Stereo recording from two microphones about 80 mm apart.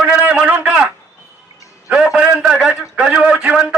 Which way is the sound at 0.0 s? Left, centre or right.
Centre.